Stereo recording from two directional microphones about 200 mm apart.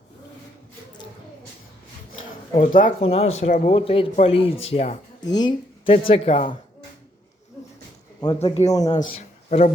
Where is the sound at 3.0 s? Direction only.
30° left (ahead or behind).